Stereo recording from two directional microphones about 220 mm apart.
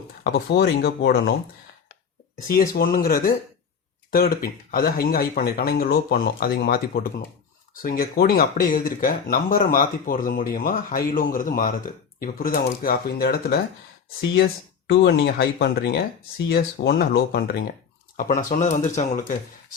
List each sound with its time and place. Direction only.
0.3 s speech: 45° left (ahead or behind)
2.3 s speech: 40° left (ahead or behind)